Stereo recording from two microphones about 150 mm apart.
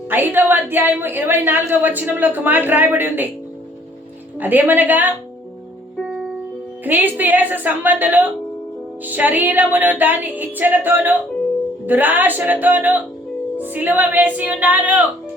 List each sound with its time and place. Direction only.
0.1 s a woman's voice: 15° right (ahead or behind)
4.4 s a woman's voice: 10° right (ahead or behind)
6.8 s a woman's voice: 10° right (ahead or behind)